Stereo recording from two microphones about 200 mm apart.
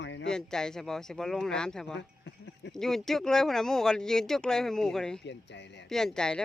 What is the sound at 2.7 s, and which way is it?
Speech, centre (ahead or behind).